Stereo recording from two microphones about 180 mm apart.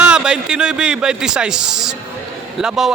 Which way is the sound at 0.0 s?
5° right (ahead or behind).